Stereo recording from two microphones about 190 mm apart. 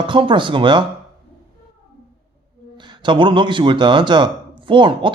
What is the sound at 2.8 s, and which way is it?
Speech, 25° right (ahead or behind).